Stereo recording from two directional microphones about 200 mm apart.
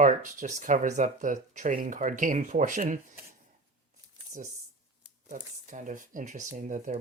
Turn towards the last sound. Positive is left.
turn(degrees=-40)  # may be behind; listen again after turning